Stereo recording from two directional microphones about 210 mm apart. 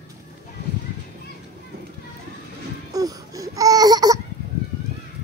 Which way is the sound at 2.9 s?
15° right (ahead or behind).